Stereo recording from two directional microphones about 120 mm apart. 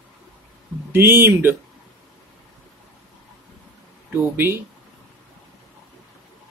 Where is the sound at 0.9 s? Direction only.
20° right (ahead or behind).